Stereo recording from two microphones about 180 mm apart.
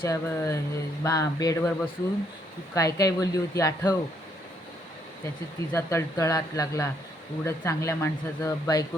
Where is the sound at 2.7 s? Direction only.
20° left (ahead or behind).